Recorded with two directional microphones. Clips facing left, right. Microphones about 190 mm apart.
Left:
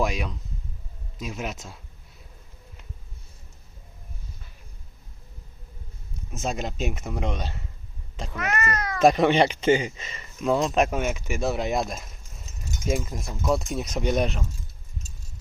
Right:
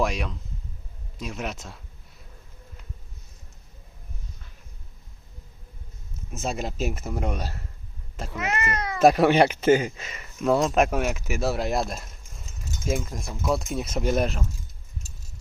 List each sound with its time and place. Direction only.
0.0 s speech: centre (ahead or behind)
6.1 s speech: centre (ahead or behind)
8.4 s speech: 25° right (ahead or behind)
9.0 s speech: 5° right (ahead or behind)